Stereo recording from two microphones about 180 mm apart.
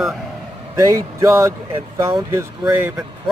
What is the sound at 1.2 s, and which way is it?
Speech, 15° right (ahead or behind).